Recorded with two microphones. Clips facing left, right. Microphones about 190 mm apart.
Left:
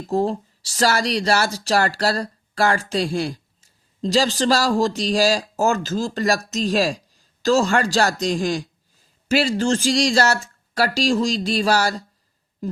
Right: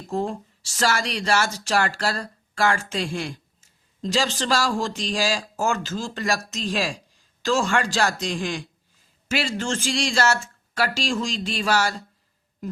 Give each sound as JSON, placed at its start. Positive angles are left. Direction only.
{"t": 0.1, "sound": "speech", "side_deg": 35}